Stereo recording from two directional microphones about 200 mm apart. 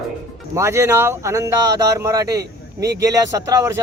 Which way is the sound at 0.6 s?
15° right (ahead or behind).